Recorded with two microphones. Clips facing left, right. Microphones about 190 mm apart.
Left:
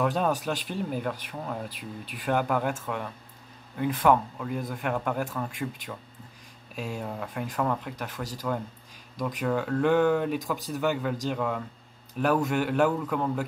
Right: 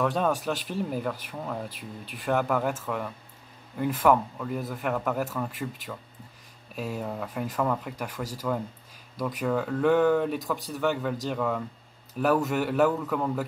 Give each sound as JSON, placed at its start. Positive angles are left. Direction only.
{"t": 0.0, "sound": "speech", "side_deg": 0}